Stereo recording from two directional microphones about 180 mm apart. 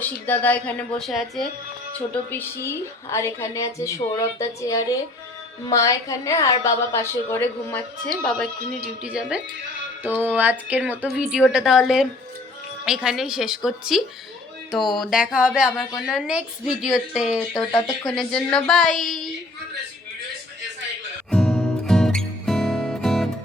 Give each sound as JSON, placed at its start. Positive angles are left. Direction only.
{"t": 0.0, "sound": "a woman's voice", "side_deg": 10}
{"t": 2.0, "sound": "a woman's voice", "side_deg": 10}
{"t": 9.0, "sound": "a woman's voice", "side_deg": -5}
{"t": 17.5, "sound": "a woman's voice", "side_deg": 15}
{"t": 18.1, "sound": "a woman's voice", "side_deg": 5}
{"t": 21.2, "sound": "music", "side_deg": 5}